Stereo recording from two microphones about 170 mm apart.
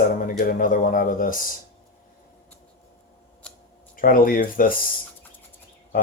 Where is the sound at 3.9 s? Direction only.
55° left (ahead or behind).